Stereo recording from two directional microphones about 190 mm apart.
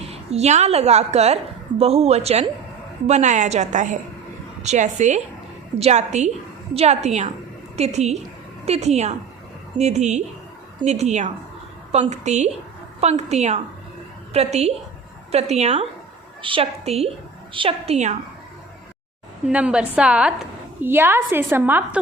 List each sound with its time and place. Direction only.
0.1 s a woman's voice: 35° right (ahead or behind)
19.5 s a woman's voice: 5° right (ahead or behind)